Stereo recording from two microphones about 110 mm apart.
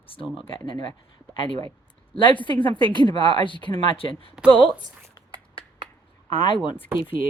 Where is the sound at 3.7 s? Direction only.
50° left (ahead or behind).